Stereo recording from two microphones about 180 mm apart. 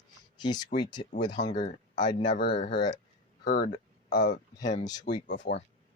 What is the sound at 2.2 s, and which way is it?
Speech, 75° left (ahead or behind).